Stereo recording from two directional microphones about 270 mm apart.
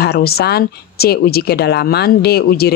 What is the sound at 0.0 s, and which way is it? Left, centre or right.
Speech, left.